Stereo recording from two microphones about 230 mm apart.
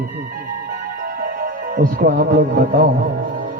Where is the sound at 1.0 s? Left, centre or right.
Right.